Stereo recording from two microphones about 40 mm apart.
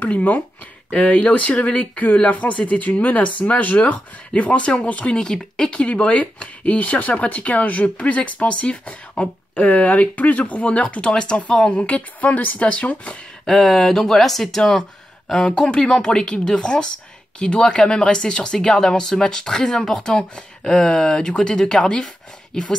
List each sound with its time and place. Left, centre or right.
0.0 s speech: left
5.1 s speech: centre
5.8 s speech: left
9.6 s speech: left
13.5 s speech: centre
14.7 s a sound: centre
15.5 s speech: centre